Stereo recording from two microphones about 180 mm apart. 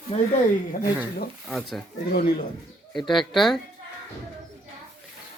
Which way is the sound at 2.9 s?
Centre (ahead or behind).